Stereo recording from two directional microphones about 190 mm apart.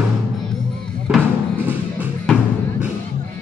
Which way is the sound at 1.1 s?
10° right (ahead or behind).